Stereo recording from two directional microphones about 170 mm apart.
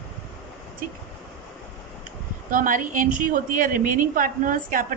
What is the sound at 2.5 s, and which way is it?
A woman's voice, 55° right (ahead or behind).